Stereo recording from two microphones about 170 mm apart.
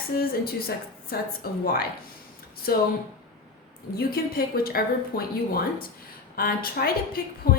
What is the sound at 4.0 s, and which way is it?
A woman's voice, 60° left (ahead or behind).